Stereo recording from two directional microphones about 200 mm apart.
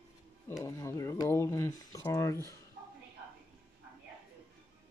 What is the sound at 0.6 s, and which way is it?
Speech, 15° left (ahead or behind).